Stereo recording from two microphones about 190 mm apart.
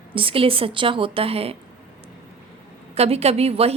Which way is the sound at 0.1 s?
30° right (ahead or behind).